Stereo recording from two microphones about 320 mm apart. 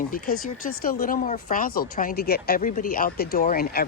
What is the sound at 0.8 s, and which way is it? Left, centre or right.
Speech, left.